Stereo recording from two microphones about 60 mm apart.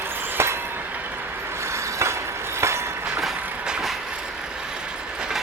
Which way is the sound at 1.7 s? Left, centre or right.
Right.